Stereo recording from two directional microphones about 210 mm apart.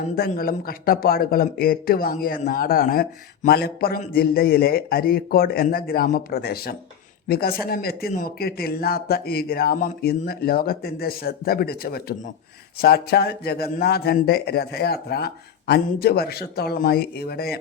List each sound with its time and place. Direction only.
0.2 s speech: 45° left (ahead or behind)